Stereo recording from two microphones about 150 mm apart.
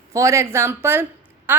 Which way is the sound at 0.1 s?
20° right (ahead or behind).